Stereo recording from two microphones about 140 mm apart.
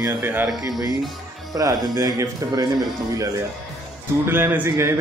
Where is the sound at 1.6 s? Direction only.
25° right (ahead or behind).